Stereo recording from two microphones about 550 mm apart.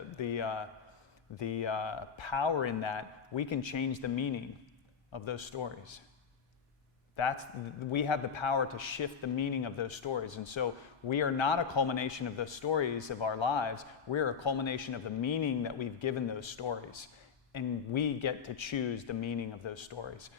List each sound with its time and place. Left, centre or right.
0.2 s a man's voice: left
7.2 s a man's voice: left